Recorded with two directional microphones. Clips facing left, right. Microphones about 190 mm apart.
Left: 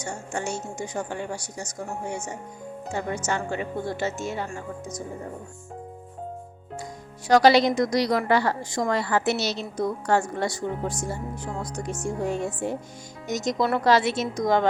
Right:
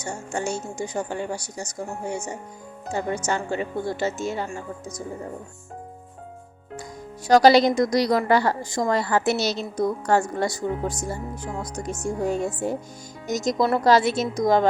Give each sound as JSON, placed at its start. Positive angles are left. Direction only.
{"t": 0.0, "sound": "a woman's voice", "side_deg": -35}
{"t": 7.3, "sound": "a woman's voice", "side_deg": -40}